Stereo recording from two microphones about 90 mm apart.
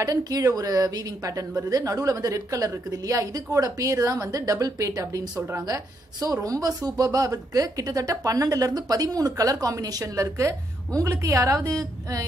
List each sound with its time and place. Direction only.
0.0 s a woman's voice: 40° right (ahead or behind)